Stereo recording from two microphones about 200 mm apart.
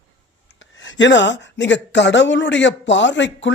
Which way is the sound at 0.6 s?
70° left (ahead or behind).